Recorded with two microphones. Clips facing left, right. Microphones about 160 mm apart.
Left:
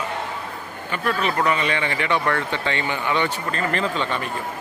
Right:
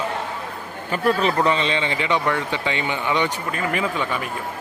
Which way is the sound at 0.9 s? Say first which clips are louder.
Right 4 dB; 35° right (ahead or behind).